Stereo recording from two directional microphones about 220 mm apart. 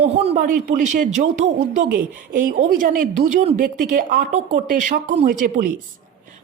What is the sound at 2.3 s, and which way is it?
A woman's voice, 40° right (ahead or behind).